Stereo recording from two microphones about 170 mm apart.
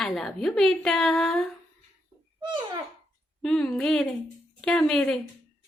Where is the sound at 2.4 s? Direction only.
25° right (ahead or behind).